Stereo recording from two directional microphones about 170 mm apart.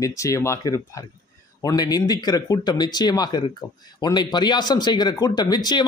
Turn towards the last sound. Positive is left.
turn(degrees=25)  # may be behind; listen again after turning